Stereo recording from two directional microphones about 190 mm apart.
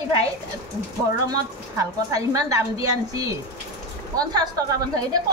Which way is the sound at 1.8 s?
15° right (ahead or behind).